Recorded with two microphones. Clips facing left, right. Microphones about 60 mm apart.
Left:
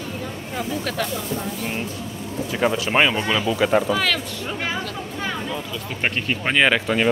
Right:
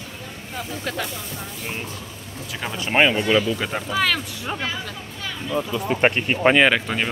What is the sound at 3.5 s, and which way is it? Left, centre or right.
Speech, centre.